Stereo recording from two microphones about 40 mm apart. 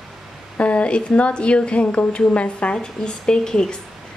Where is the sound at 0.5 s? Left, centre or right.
Left.